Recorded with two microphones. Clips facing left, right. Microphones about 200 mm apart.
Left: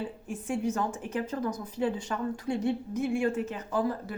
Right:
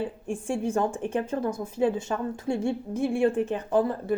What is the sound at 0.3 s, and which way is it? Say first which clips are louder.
A woman's voice: right 3 dB; 30° right (ahead or behind).